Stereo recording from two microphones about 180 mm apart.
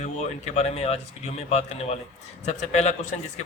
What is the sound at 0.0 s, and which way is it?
A man's voice, 40° left (ahead or behind).